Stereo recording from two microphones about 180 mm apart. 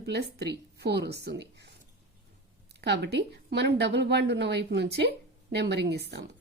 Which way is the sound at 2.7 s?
70° right (ahead or behind).